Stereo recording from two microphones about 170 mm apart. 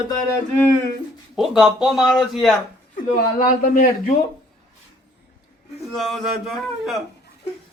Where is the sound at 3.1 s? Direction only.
55° left (ahead or behind).